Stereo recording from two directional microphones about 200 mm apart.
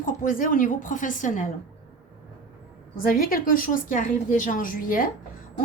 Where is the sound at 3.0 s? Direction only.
45° left (ahead or behind).